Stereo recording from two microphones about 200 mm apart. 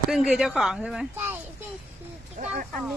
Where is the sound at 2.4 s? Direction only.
40° right (ahead or behind).